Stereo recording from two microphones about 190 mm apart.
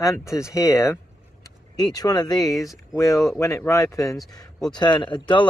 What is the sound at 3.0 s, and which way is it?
Speech, 15° left (ahead or behind).